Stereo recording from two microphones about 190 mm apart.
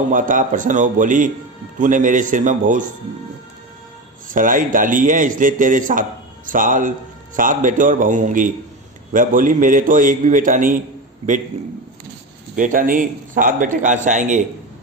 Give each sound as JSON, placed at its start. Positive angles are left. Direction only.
{"t": 0.1, "sound": "a man's voice", "side_deg": -45}
{"t": 4.3, "sound": "a man's voice", "side_deg": -45}